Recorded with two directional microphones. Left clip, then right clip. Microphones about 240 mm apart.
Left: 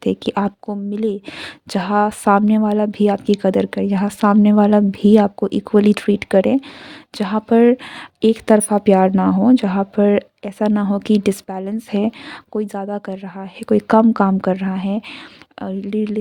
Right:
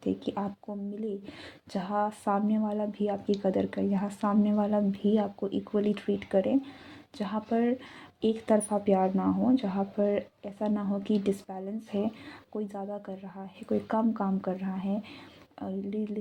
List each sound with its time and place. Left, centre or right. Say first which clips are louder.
0.0 s speech: left 13 dB; left